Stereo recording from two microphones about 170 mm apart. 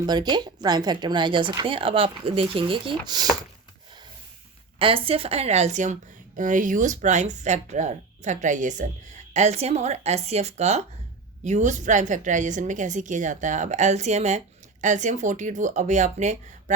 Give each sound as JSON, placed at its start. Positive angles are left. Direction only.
{"t": 0.0, "sound": "speech", "side_deg": -25}
{"t": 4.8, "sound": "a woman's voice", "side_deg": -30}